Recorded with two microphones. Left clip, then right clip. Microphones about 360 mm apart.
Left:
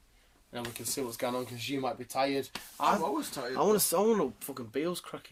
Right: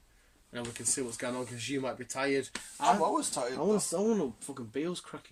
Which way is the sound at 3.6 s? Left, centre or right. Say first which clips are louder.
Left 4 dB; left.